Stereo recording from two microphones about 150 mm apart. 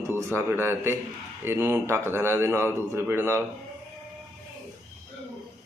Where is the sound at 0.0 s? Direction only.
15° right (ahead or behind).